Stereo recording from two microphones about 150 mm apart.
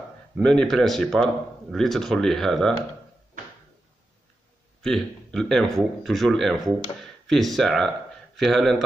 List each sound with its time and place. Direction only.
0.4 s speech: 5° left (ahead or behind)
4.8 s speech: 5° left (ahead or behind)